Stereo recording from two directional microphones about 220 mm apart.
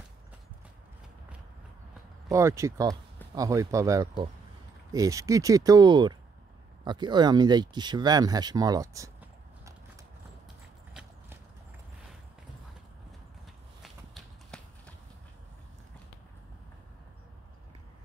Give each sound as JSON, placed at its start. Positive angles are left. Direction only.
{"t": 2.2, "sound": "speech", "side_deg": -15}
{"t": 10.9, "sound": "clip-clop", "side_deg": -5}
{"t": 13.8, "sound": "horse", "side_deg": 0}